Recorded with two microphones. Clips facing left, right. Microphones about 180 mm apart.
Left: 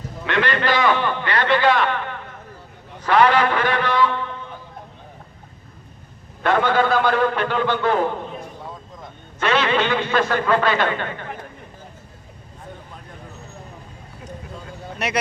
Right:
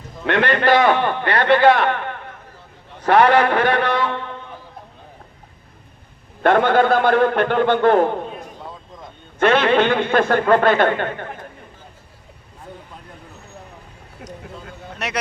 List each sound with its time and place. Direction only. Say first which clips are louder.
0.3 s a man's voice: right 5 dB; 55° right (ahead or behind)
6.4 s a man's voice: right 4 dB; 55° right (ahead or behind)
9.4 s a man's voice: right 5 dB; 55° right (ahead or behind)
14.9 s speech: left 2 dB; centre (ahead or behind)